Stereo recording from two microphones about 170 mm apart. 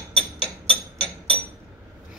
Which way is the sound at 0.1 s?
35° right (ahead or behind).